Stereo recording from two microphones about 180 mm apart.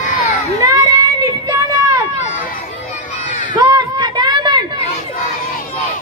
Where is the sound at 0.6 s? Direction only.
20° right (ahead or behind).